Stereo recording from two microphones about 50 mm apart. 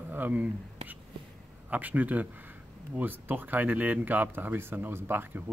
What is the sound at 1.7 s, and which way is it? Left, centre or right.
Speech, right.